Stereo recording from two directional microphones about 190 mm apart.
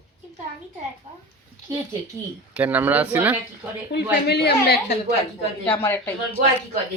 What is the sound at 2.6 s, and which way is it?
Speech, 10° right (ahead or behind).